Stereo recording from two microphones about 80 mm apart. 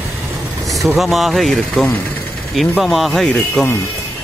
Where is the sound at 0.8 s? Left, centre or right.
Centre.